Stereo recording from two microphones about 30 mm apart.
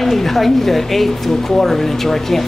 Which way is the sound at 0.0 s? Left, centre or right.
Centre.